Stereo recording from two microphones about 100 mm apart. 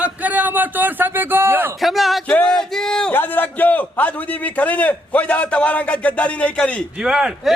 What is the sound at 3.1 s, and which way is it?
A man's voice, 20° left (ahead or behind).